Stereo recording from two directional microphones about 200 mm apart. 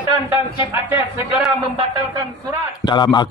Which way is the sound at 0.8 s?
10° right (ahead or behind).